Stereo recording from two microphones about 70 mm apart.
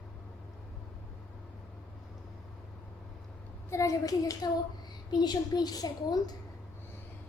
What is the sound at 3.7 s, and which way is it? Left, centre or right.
Speech, left.